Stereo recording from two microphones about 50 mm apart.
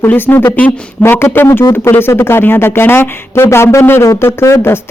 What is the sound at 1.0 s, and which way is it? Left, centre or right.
Speech, left.